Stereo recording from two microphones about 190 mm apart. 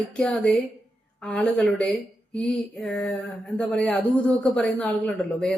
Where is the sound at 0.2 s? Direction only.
5° left (ahead or behind).